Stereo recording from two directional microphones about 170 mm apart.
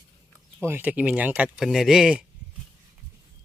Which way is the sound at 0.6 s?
10° right (ahead or behind).